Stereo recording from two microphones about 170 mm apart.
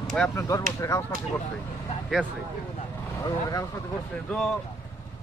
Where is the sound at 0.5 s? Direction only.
20° left (ahead or behind).